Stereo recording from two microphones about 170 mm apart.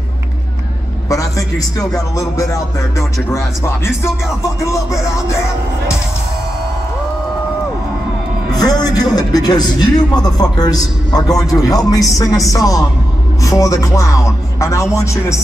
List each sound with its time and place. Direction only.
1.0 s a sound: 20° left (ahead or behind)
3.3 s speech: 15° left (ahead or behind)
8.6 s speech: 20° left (ahead or behind)